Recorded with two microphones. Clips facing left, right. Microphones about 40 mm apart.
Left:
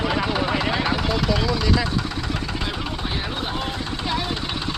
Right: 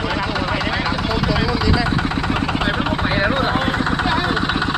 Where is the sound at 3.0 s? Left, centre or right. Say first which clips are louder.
Right 12 dB; right.